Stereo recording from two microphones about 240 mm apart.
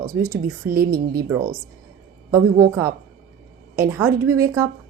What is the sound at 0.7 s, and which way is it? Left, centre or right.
Speech, right.